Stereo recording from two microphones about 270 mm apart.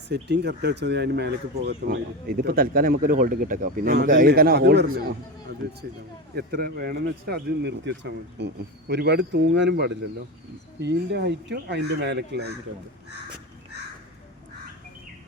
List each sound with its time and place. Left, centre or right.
0.1 s speech: right